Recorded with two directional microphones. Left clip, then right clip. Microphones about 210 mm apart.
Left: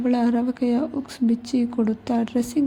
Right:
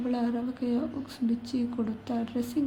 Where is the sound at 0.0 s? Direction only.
30° left (ahead or behind).